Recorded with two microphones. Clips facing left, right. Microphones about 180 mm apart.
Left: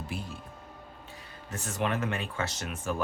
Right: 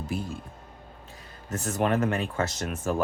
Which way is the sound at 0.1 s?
45° right (ahead or behind).